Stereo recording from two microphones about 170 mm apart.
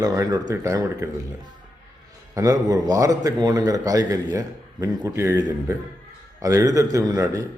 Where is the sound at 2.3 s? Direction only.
20° right (ahead or behind).